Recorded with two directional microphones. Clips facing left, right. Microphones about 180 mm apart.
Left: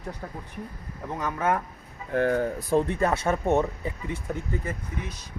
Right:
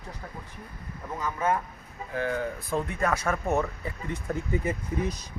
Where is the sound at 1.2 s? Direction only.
65° left (ahead or behind).